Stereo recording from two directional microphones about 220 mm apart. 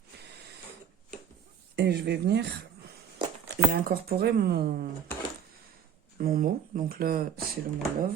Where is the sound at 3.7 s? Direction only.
45° right (ahead or behind).